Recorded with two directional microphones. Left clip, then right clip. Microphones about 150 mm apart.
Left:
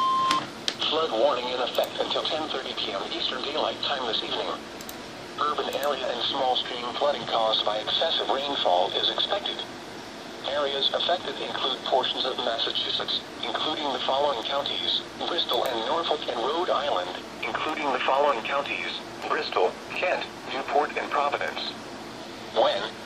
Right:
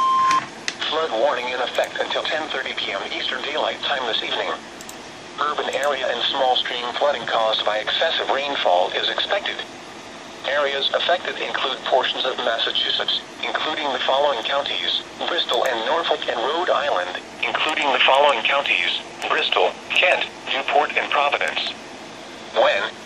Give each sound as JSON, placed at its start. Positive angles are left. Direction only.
{"t": 0.7, "sound": "speech", "side_deg": 0}
{"t": 18.7, "sound": "speech", "side_deg": 70}
{"t": 19.6, "sound": "speech", "side_deg": -10}
{"t": 22.5, "sound": "speech", "side_deg": -5}